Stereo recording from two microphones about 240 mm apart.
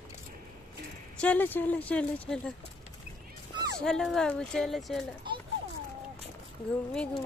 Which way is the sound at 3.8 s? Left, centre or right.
Centre.